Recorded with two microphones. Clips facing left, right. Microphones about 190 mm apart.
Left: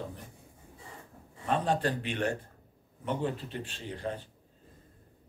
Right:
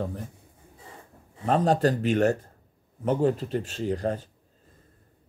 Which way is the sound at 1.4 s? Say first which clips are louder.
Right 7 dB; 40° right (ahead or behind).